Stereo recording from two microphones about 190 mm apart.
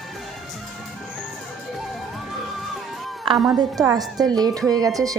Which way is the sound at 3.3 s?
Centre (ahead or behind).